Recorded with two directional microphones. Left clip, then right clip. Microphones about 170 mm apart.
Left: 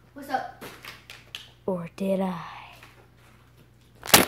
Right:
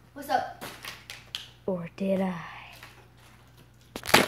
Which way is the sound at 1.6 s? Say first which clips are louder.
Left 2 dB; 20° left (ahead or behind).